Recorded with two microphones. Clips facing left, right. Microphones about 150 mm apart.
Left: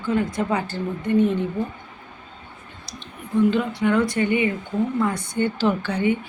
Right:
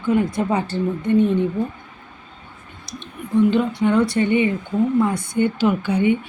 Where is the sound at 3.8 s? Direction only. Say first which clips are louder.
Right 1 dB; 20° right (ahead or behind).